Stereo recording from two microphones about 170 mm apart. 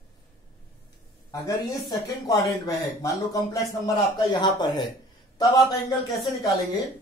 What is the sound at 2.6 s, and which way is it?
Speech, 20° left (ahead or behind).